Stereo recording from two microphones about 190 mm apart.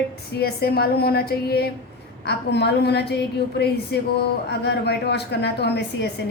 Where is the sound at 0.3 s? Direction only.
55° left (ahead or behind).